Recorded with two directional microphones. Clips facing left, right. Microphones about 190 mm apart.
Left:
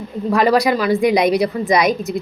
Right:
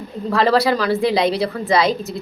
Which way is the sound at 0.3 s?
15° left (ahead or behind).